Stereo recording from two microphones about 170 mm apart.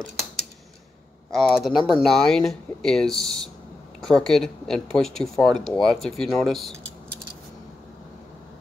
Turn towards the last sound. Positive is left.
turn(degrees=0)  # may be behind; listen again after turning